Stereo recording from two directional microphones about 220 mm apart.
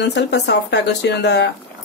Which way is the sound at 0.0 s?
50° left (ahead or behind).